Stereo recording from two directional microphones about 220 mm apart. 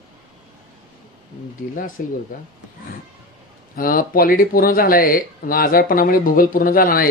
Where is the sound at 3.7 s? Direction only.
40° left (ahead or behind).